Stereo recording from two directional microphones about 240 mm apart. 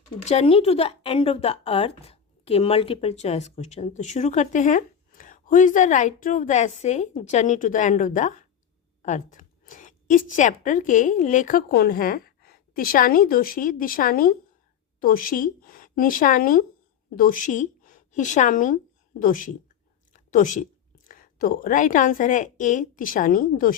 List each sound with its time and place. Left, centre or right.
0.3 s a woman's voice: left